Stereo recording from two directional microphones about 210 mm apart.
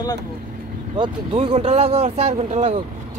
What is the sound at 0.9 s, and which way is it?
Speech, 25° right (ahead or behind).